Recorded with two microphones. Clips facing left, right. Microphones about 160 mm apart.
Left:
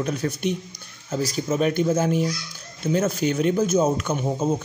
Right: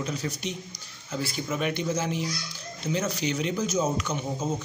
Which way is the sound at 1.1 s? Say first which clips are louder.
Left 6 dB; 40° left (ahead or behind).